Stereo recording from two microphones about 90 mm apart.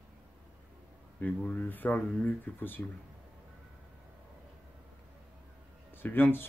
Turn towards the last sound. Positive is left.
turn(degrees=25)  # may be behind; listen again after turning